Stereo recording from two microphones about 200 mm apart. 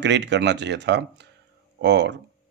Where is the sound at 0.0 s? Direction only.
60° right (ahead or behind).